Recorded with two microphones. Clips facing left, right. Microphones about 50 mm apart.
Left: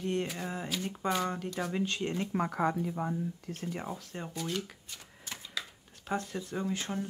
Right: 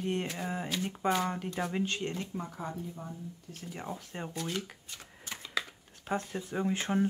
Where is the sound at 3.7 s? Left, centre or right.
Centre.